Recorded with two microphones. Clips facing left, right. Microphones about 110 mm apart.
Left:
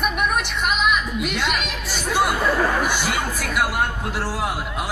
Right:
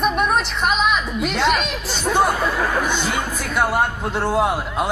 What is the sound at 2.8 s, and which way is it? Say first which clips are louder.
Speech: right 1 dB; 10° left (ahead or behind).